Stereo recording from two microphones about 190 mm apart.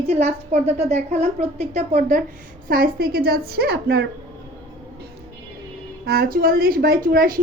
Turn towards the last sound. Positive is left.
turn(degrees=-50)  # may be behind; listen again after turning